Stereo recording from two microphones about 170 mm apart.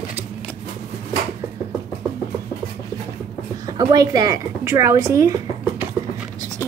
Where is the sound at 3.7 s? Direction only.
20° right (ahead or behind).